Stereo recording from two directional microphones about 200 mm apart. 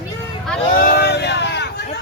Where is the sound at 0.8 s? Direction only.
50° left (ahead or behind).